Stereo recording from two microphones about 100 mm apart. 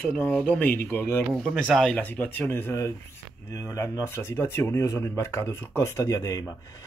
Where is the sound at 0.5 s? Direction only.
15° left (ahead or behind).